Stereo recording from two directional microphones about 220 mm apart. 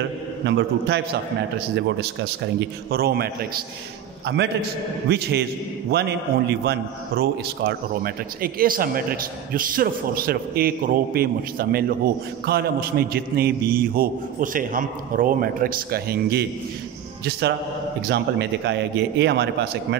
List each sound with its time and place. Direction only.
0.5 s a man's voice: 50° right (ahead or behind)
2.9 s a man's voice: 45° right (ahead or behind)